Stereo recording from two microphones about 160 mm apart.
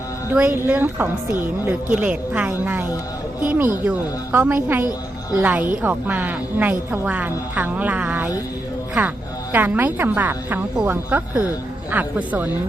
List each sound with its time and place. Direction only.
0.3 s a woman's voice: 15° right (ahead or behind)